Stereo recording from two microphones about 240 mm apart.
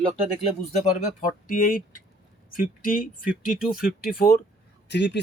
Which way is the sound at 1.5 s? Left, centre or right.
Left.